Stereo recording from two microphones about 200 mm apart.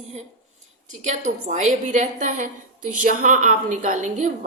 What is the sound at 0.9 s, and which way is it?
A woman's voice, 35° right (ahead or behind).